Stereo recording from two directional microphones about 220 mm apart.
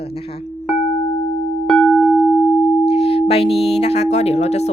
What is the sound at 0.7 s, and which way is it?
Music, 25° left (ahead or behind).